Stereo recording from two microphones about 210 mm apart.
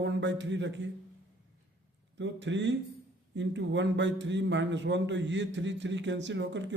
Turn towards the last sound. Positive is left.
turn(degrees=-60)  # may be behind; listen again after turning